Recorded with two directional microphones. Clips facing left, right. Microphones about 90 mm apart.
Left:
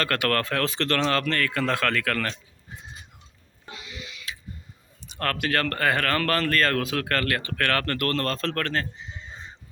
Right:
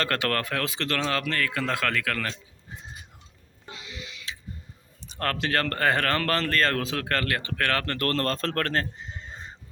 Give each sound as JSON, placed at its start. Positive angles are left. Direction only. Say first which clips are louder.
{"t": 0.0, "sound": "a man's voice", "louder": "left 2 dB", "side_deg": -25}
{"t": 3.8, "sound": "a sound", "louder": "even", "side_deg": -30}
{"t": 5.0, "sound": "speech", "louder": "left 1 dB", "side_deg": -25}
{"t": 7.9, "sound": "speech", "louder": "even", "side_deg": -35}